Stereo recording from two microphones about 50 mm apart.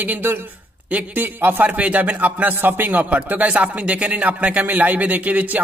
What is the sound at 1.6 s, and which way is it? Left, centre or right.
A man's voice, right.